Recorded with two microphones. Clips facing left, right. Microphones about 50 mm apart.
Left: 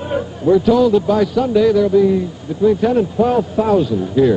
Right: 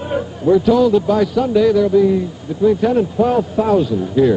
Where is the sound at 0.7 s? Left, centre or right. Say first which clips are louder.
Even; centre.